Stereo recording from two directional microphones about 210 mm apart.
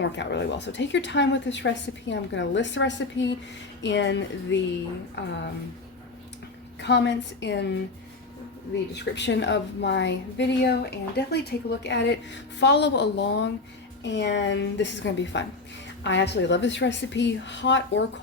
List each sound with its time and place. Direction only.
0.0 s a woman's voice: 55° left (ahead or behind)
6.7 s a woman's voice: 55° left (ahead or behind)
9.0 s a woman's voice: 55° left (ahead or behind)